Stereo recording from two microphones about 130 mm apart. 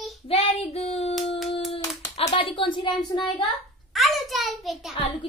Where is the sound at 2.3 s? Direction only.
40° left (ahead or behind).